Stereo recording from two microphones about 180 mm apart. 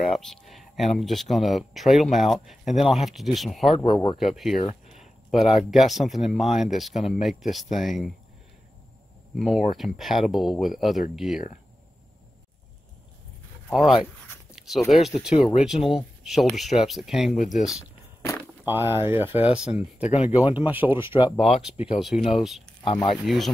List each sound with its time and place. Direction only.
0.0 s speech: centre (ahead or behind)
4.6 s a sound: 40° left (ahead or behind)
5.3 s speech: centre (ahead or behind)
9.4 s speech: centre (ahead or behind)
13.7 s speech: centre (ahead or behind)
20.0 s speech: 35° left (ahead or behind)
20.5 s speech: 10° right (ahead or behind)